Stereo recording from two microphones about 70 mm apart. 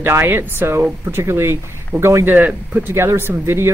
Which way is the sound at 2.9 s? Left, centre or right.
Right.